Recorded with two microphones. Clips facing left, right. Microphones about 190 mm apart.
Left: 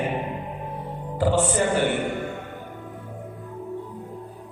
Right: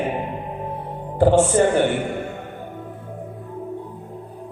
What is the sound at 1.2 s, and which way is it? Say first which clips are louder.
Mantra: right 6 dB; 50° right (ahead or behind).